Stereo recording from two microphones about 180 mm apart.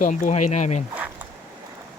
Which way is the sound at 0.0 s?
45° left (ahead or behind).